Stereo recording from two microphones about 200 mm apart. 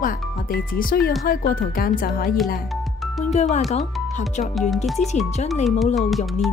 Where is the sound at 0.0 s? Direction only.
45° left (ahead or behind).